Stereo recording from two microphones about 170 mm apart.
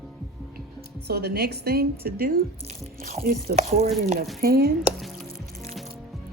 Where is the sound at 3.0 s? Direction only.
55° right (ahead or behind).